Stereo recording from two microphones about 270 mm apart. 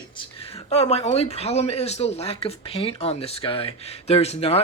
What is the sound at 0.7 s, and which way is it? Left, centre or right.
Speech, left.